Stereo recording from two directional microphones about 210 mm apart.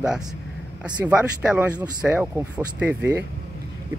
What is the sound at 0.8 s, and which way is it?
Speech, 5° right (ahead or behind).